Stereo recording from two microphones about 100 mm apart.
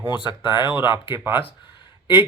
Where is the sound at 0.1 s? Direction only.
50° left (ahead or behind).